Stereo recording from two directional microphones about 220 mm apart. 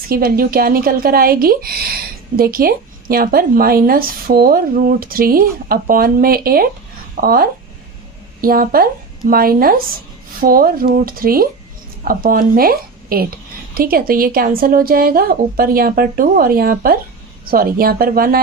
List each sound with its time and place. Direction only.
0.1 s a woman's voice: 45° right (ahead or behind)